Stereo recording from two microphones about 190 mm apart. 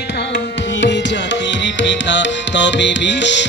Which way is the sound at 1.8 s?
70° left (ahead or behind).